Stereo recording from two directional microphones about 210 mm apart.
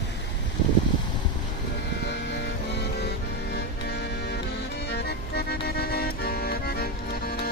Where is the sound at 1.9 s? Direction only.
55° left (ahead or behind).